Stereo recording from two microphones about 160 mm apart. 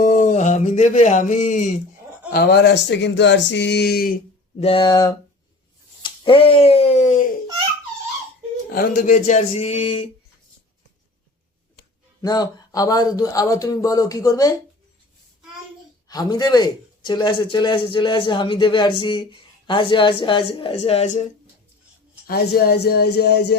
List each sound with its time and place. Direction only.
0.0 s a sound: 50° left (ahead or behind)
2.3 s speech: 75° left (ahead or behind)
4.6 s speech: 35° left (ahead or behind)
6.0 s finger snapping: 35° left (ahead or behind); by 7.3 s 50° left (ahead or behind)
8.7 s speech: 60° left (ahead or behind); by 10.1 s 35° left (ahead or behind)
12.2 s speech: 25° left (ahead or behind)
16.0 s speech: 25° left (ahead or behind); by 21.2 s 40° left (ahead or behind)
22.3 s speech: 80° left